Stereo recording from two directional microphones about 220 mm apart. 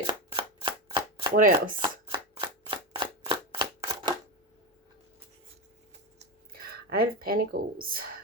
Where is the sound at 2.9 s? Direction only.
20° right (ahead or behind).